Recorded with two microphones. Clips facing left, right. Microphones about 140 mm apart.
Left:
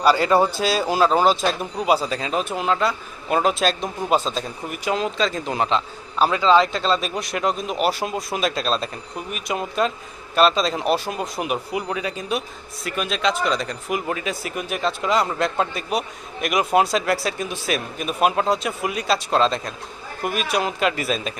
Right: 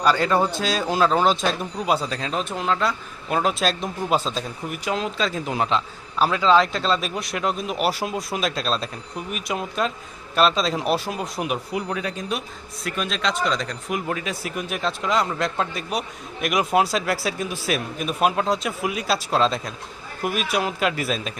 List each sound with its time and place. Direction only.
0.0 s a man's voice: 10° left (ahead or behind)